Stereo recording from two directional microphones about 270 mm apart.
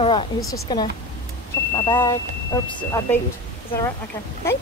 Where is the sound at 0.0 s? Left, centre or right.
Left.